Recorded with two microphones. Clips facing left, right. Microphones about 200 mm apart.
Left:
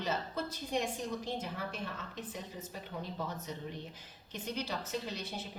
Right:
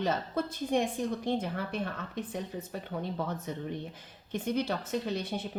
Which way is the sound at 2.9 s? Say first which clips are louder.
Right 6 dB; 60° right (ahead or behind).